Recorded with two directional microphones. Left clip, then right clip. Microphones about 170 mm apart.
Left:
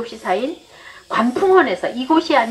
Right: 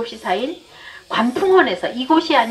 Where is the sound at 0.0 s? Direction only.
30° right (ahead or behind).